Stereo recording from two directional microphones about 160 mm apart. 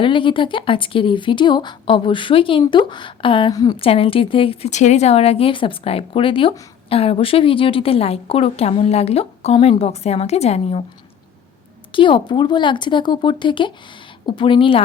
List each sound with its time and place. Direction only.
0.0 s a woman's voice: 30° left (ahead or behind)
3.8 s a woman's voice: 35° left (ahead or behind)
11.9 s a woman's voice: 30° left (ahead or behind)